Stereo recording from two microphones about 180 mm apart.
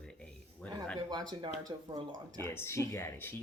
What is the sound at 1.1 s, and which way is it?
Speech, 25° right (ahead or behind).